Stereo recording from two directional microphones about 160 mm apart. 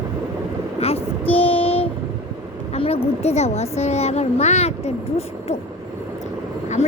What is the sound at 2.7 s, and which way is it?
A woman's voice, 35° left (ahead or behind).